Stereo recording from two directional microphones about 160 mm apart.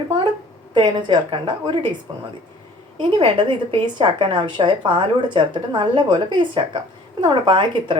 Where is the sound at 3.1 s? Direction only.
35° right (ahead or behind).